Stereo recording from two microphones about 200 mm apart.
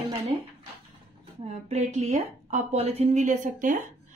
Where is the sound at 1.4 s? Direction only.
35° right (ahead or behind).